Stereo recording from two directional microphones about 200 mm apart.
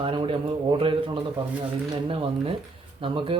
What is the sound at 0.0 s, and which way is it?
Speech, 25° right (ahead or behind).